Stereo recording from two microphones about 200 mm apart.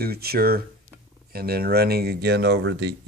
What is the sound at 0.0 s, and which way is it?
Speech, 50° right (ahead or behind).